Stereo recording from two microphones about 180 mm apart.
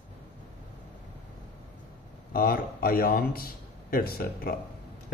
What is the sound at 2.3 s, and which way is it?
A man's voice, 55° left (ahead or behind).